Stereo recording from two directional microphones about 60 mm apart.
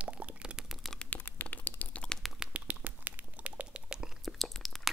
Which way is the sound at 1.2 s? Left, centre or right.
Left.